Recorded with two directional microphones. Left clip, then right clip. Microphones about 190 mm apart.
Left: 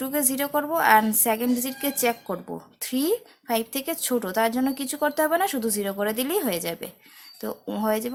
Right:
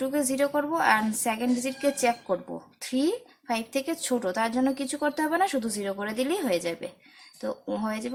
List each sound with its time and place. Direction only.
0.0 s a woman's voice: 30° left (ahead or behind)